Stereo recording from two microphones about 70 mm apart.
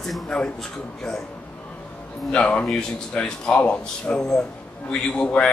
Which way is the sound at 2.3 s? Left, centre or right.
Centre.